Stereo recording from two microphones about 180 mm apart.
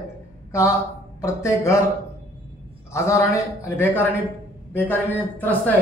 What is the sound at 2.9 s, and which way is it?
A man's voice, 15° left (ahead or behind).